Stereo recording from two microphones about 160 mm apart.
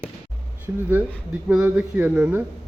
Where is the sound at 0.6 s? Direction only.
10° right (ahead or behind).